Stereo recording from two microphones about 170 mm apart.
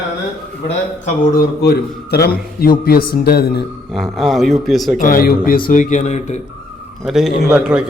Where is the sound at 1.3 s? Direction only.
65° left (ahead or behind).